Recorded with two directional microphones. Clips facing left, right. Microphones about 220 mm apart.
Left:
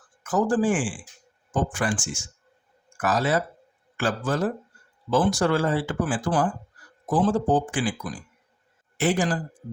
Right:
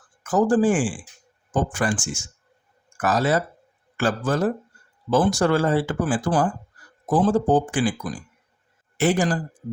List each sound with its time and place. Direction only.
0.2 s a man's voice: 40° right (ahead or behind)
9.0 s speech: 45° right (ahead or behind)